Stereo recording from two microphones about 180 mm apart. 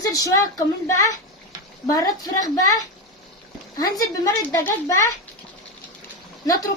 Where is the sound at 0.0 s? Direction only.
20° left (ahead or behind).